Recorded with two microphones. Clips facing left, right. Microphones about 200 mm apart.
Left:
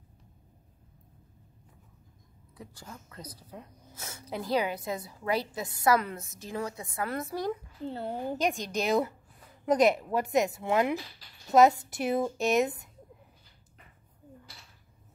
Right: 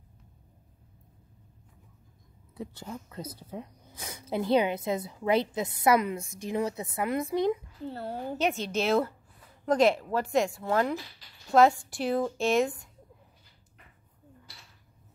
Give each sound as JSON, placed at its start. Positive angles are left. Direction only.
{"t": 2.5, "sound": "speech", "side_deg": -25}
{"t": 6.1, "sound": "a woman's voice", "side_deg": 0}
{"t": 6.5, "sound": "a woman's voice", "side_deg": -25}
{"t": 7.8, "sound": "a woman's voice", "side_deg": 20}